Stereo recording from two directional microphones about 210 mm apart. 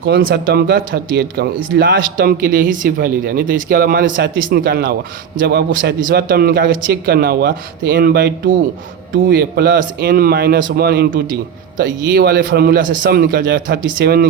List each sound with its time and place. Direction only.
0.0 s speech: 50° right (ahead or behind)